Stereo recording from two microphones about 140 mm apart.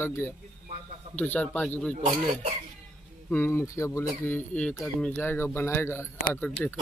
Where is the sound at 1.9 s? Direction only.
55° right (ahead or behind).